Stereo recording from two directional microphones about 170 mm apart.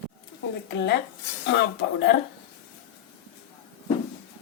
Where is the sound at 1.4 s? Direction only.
90° left.